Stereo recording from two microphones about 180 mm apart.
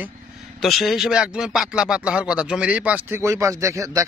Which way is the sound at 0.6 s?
Centre (ahead or behind).